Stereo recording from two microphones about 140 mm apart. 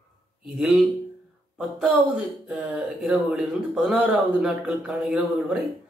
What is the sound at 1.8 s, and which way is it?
Speech, centre (ahead or behind).